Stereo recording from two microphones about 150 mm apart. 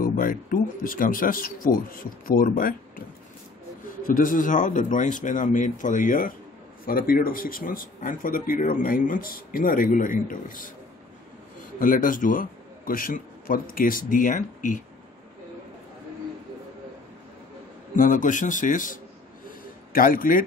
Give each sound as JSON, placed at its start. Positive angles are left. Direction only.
{"t": 0.0, "sound": "speech", "side_deg": 70}
{"t": 4.1, "sound": "speech", "side_deg": 65}
{"t": 6.9, "sound": "speech", "side_deg": 75}
{"t": 11.8, "sound": "a man's voice", "side_deg": 65}
{"t": 17.9, "sound": "speech", "side_deg": 60}
{"t": 19.9, "sound": "speech", "side_deg": 70}